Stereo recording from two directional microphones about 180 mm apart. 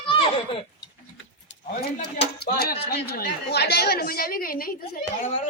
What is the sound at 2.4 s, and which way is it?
A woman's voice, 60° left (ahead or behind).